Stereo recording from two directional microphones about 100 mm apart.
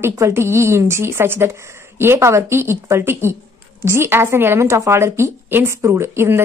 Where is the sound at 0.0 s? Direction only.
25° right (ahead or behind).